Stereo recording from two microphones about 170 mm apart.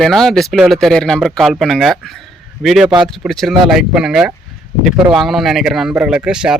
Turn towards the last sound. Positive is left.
turn(degrees=-5)  # may be behind; listen again after turning